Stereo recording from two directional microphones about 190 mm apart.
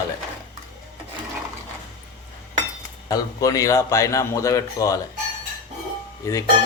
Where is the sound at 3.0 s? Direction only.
20° left (ahead or behind).